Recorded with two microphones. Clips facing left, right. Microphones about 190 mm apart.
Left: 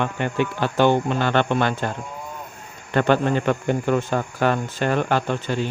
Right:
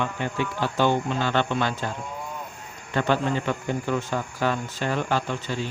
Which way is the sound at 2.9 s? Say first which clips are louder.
Left 5 dB; 60° left (ahead or behind).